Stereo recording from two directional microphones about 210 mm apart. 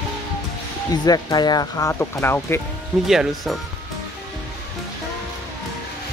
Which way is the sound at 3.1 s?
Centre (ahead or behind).